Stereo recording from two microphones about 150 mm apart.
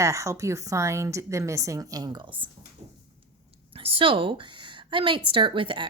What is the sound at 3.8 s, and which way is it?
A woman's voice, 40° right (ahead or behind).